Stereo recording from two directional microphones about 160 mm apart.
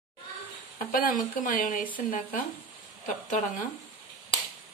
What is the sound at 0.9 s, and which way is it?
Speech, 60° left (ahead or behind).